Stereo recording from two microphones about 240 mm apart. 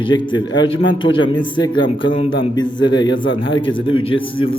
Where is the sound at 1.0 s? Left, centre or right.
Left.